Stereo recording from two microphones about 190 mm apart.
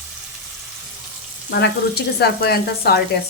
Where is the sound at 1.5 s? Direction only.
60° left (ahead or behind).